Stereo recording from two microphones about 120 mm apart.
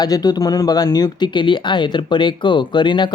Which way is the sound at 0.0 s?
35° left (ahead or behind).